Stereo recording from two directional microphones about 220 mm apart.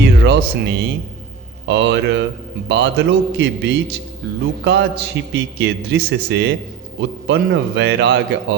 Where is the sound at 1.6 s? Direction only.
50° right (ahead or behind).